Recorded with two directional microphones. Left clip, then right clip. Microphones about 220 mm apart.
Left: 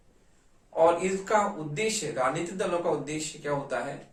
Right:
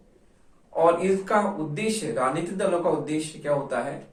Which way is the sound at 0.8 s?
15° left (ahead or behind).